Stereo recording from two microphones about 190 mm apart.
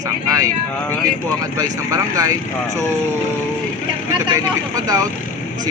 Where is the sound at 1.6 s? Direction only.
20° right (ahead or behind).